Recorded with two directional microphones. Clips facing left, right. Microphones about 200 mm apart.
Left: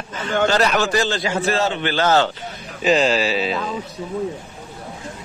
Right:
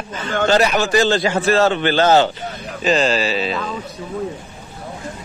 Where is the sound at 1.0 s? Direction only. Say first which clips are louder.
Right 5 dB; 35° right (ahead or behind).